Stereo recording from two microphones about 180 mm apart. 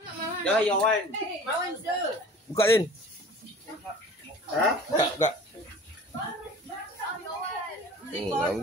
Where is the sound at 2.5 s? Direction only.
15° left (ahead or behind).